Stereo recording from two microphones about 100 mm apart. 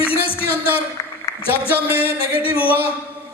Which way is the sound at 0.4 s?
20° left (ahead or behind).